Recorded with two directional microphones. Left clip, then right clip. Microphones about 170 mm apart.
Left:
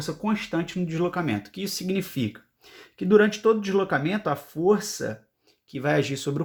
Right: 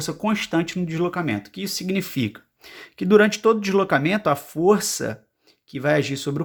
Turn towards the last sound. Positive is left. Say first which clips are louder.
# right 3 dB
turn(degrees=-15)  # may be behind; listen again after turning